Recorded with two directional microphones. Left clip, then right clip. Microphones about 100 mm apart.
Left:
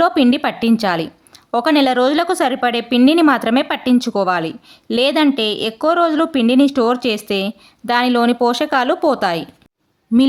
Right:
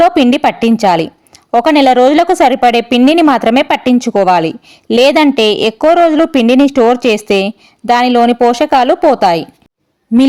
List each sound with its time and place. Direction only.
0.0 s a woman's voice: 35° right (ahead or behind)
5.9 s a woman's voice: 30° right (ahead or behind)